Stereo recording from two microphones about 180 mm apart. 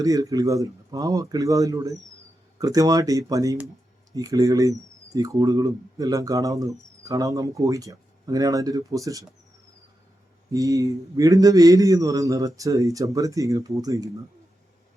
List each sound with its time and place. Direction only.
0.0 s speech: 20° right (ahead or behind)
10.5 s speech: 20° right (ahead or behind)